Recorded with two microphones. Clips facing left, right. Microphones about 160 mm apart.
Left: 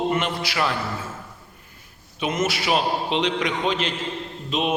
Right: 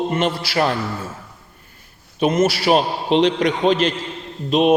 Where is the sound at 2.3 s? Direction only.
35° right (ahead or behind).